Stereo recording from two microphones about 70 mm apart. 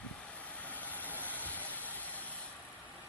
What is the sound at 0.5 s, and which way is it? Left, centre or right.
Vehicle, left.